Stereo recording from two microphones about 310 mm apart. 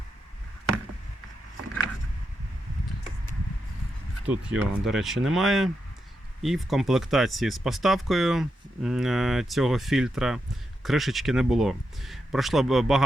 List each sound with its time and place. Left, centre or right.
4.3 s speech: centre